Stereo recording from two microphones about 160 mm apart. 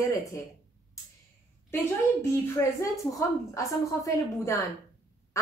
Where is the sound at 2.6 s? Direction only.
15° left (ahead or behind).